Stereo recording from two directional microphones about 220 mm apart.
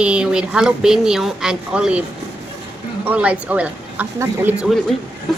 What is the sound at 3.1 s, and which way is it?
Speech, 5° right (ahead or behind).